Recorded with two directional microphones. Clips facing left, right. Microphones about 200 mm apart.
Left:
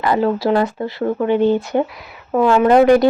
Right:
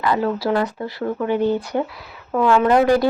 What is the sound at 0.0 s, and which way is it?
Speech, 30° left (ahead or behind).